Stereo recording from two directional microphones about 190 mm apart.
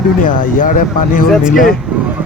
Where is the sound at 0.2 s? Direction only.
45° left (ahead or behind).